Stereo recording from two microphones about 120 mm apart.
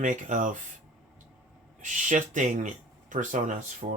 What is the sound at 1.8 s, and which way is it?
Speech, 90° right.